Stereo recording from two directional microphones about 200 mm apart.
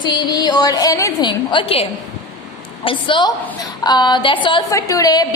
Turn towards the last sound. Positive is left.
turn(degrees=20)  # may be behind; listen again after turning